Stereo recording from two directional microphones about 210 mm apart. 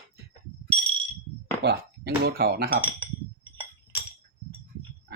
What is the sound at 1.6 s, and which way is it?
Speech, 50° right (ahead or behind).